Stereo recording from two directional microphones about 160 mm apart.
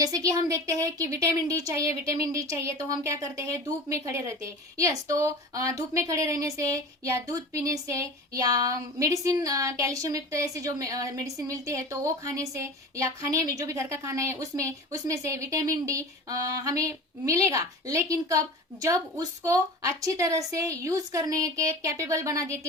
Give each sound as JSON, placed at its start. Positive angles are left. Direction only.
{"t": 0.0, "sound": "a woman's voice", "side_deg": -20}